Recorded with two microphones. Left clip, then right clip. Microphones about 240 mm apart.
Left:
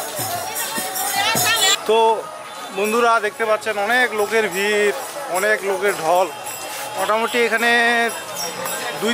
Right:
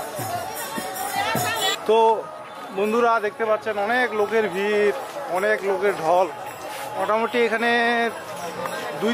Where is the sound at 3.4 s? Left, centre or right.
Centre.